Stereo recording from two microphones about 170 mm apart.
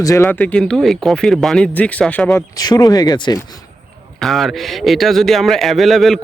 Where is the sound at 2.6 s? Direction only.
20° left (ahead or behind).